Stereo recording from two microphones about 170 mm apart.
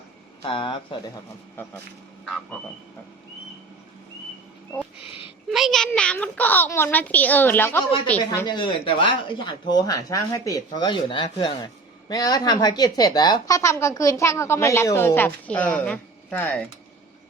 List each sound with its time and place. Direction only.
0.4 s speech: 30° left (ahead or behind)
5.5 s a child's voice: centre (ahead or behind)
8.3 s speech: 25° left (ahead or behind)